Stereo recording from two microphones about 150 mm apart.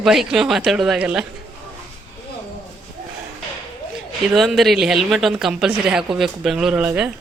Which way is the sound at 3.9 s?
Centre (ahead or behind).